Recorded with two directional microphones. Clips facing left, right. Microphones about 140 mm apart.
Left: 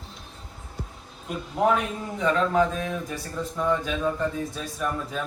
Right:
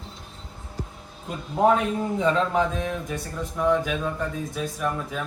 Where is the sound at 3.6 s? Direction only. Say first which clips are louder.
Right 3 dB; 5° right (ahead or behind).